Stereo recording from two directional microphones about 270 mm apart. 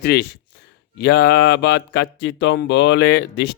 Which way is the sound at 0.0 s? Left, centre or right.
Left.